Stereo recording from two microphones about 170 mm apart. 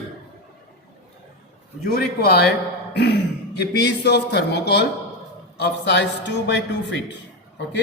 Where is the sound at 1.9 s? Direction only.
70° left (ahead or behind).